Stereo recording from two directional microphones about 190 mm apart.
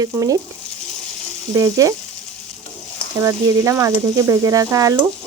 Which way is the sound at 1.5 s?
15° right (ahead or behind).